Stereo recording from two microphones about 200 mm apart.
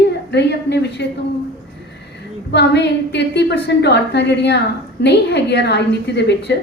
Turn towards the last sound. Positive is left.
turn(degrees=60)  # may be behind; listen again after turning